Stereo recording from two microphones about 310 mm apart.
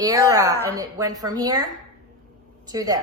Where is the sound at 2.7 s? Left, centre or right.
Centre.